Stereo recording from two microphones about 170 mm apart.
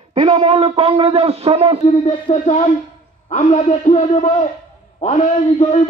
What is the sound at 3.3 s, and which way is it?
A man's voice, 40° left (ahead or behind).